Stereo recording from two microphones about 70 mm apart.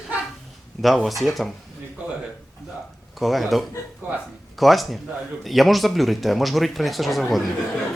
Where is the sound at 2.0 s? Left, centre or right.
Centre.